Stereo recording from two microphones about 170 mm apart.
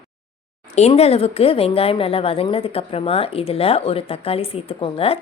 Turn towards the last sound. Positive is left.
turn(degrees=35)  # may be behind; listen again after turning